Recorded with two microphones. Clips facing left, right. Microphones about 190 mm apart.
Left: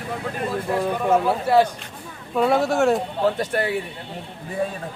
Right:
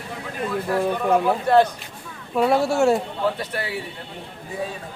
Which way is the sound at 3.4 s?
45° left (ahead or behind).